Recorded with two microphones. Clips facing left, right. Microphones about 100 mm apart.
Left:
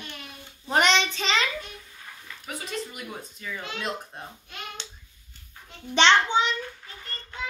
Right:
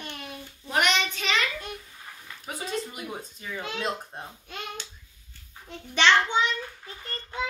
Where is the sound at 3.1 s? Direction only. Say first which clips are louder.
Even; 25° right (ahead or behind).